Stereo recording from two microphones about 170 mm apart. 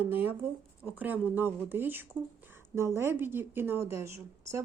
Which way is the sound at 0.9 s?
10° right (ahead or behind).